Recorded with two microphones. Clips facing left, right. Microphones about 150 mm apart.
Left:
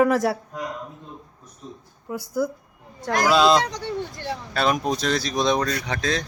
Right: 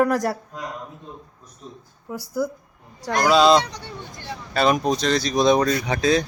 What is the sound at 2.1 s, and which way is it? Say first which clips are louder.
A woman's voice: left 1 dB; centre (ahead or behind).